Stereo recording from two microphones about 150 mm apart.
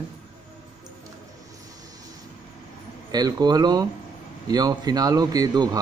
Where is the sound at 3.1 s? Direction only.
25° right (ahead or behind).